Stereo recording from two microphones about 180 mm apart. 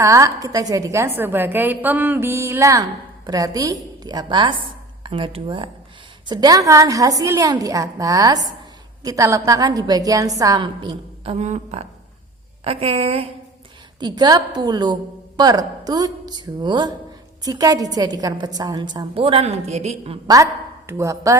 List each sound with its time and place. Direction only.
0.0 s a woman's voice: 15° right (ahead or behind); by 13.2 s 35° right (ahead or behind)
14.0 s a woman's voice: 25° right (ahead or behind)
20.2 s a woman's voice: 20° right (ahead or behind)